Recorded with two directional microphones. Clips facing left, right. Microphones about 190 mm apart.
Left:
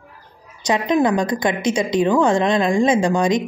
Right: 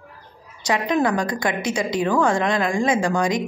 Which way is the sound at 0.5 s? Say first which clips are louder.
Left 3 dB; 20° left (ahead or behind).